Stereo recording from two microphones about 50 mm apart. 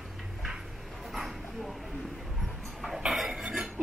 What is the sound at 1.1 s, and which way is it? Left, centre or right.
Dog, centre.